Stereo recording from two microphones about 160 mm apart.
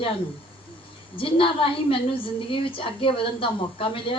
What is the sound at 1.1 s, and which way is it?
Speech, 35° left (ahead or behind).